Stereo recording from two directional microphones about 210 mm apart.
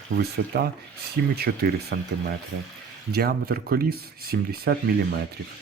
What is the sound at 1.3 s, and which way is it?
Speech, 50° right (ahead or behind).